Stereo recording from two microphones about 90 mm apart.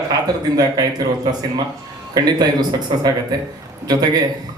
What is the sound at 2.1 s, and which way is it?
A man's voice, 45° right (ahead or behind).